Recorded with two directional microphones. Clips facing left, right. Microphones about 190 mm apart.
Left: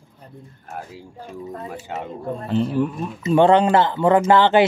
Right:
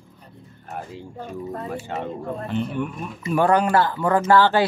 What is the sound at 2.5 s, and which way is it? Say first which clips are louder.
Speech: left 7 dB; 35° left (ahead or behind).